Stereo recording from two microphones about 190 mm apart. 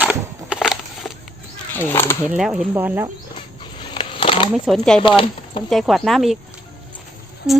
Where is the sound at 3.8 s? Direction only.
25° left (ahead or behind).